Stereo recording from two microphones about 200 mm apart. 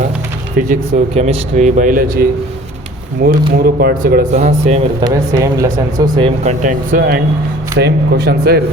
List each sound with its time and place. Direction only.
0.5 s speech: 40° right (ahead or behind)
3.2 s speech: 50° right (ahead or behind)
7.8 s speech: 55° right (ahead or behind)